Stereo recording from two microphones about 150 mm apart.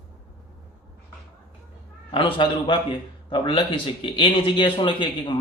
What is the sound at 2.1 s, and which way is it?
A man's voice, 35° left (ahead or behind).